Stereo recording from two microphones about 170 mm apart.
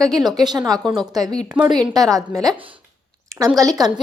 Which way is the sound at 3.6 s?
20° right (ahead or behind).